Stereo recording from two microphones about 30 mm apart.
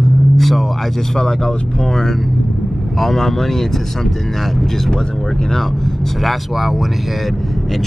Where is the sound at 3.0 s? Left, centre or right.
Centre.